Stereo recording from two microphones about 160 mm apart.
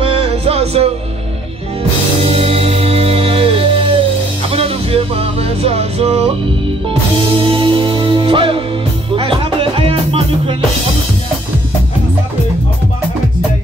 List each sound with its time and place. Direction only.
0.0 s music: 35° right (ahead or behind)
2.2 s music: 35° right (ahead or behind)
7.3 s music: 30° right (ahead or behind)